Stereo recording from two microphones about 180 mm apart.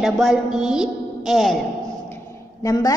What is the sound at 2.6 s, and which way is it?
Speech, 20° left (ahead or behind).